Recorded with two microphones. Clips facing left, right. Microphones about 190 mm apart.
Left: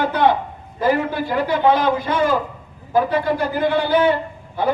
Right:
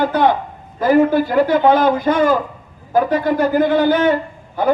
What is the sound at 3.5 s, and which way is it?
Speech, 45° right (ahead or behind).